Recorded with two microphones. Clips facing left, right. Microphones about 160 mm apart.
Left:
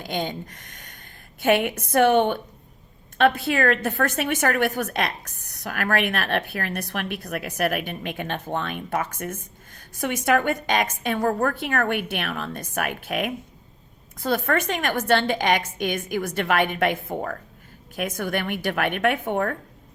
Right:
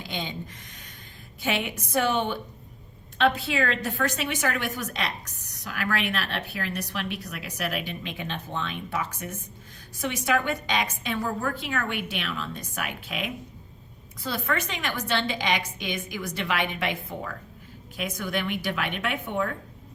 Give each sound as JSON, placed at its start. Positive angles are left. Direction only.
{"t": 0.0, "sound": "a woman's voice", "side_deg": 50}